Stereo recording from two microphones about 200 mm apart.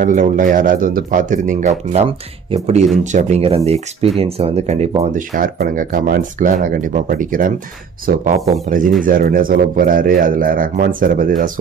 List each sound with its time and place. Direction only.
0.0 s speech: 40° right (ahead or behind)
5.3 s speech: 45° right (ahead or behind)